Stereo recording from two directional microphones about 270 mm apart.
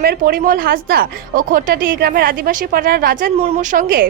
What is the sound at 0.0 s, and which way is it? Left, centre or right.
A woman's voice, right.